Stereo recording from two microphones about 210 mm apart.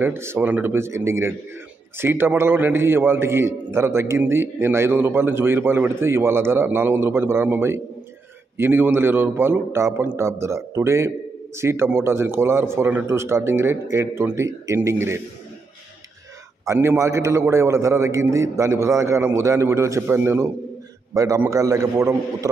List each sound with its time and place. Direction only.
0.0 s a man's voice: 10° right (ahead or behind)
16.6 s a man's voice: 15° right (ahead or behind)